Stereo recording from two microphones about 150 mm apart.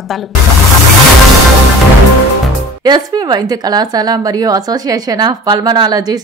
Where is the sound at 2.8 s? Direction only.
25° right (ahead or behind).